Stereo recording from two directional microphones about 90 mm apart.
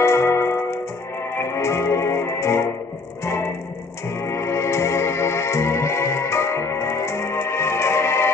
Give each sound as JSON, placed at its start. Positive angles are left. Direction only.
{"t": 0.0, "sound": "keyboard", "side_deg": 30}
{"t": 1.4, "sound": "music", "side_deg": 30}